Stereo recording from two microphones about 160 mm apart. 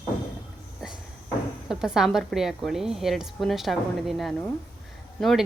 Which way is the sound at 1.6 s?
5° right (ahead or behind).